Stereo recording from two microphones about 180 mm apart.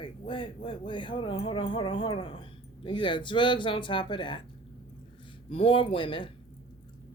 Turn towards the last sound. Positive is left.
turn(degrees=30)  # may be behind; listen again after turning